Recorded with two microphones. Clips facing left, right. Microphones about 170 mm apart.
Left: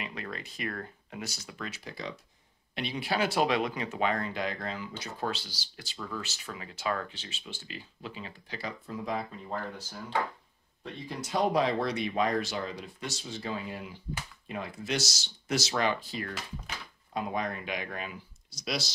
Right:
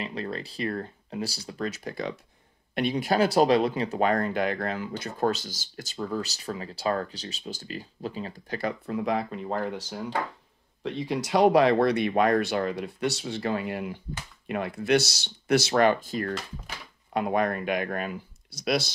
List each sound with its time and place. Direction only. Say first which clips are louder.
0.0 s speech: right 6 dB; 35° right (ahead or behind)
8.5 s speech: right 8 dB; 60° right (ahead or behind)
17.1 s speech: right 7 dB; 65° right (ahead or behind)